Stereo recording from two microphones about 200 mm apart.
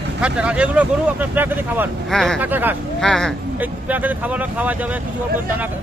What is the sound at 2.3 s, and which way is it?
Speech, 10° right (ahead or behind).